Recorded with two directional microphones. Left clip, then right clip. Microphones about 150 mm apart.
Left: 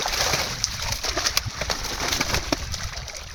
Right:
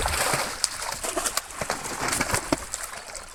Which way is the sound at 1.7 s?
45° left (ahead or behind).